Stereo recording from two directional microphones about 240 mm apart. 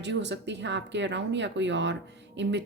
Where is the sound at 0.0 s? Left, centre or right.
Right.